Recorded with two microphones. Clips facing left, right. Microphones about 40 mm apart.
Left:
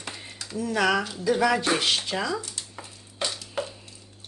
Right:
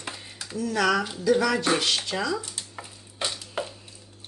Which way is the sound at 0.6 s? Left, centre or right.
Centre.